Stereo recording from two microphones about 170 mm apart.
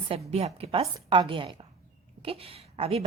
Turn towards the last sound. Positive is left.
turn(degrees=-35)  # may be behind; listen again after turning